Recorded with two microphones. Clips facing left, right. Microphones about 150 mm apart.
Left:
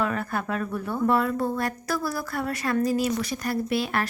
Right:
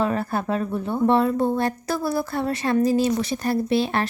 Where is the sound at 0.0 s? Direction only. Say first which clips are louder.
Right 4 dB; 30° right (ahead or behind).